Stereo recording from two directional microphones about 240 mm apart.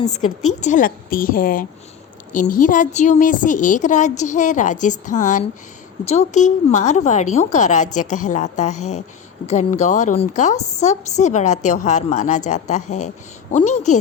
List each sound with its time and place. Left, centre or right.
0.1 s a woman's voice: left